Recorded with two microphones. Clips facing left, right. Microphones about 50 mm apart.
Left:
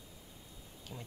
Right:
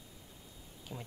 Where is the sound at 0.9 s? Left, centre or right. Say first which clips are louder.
Right 3 dB; centre.